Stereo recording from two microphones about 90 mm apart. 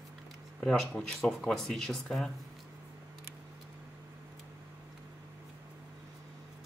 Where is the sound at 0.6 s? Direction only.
5° left (ahead or behind).